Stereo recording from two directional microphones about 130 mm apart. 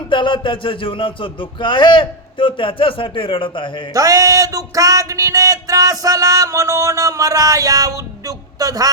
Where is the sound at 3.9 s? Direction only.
25° right (ahead or behind).